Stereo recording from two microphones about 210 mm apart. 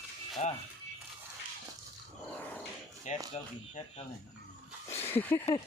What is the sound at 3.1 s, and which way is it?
Speech, 35° left (ahead or behind).